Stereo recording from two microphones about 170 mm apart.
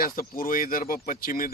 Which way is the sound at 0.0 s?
55° left (ahead or behind).